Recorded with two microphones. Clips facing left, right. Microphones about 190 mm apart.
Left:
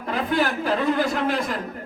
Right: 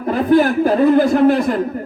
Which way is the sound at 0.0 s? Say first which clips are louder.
Right 10 dB; 45° right (ahead or behind).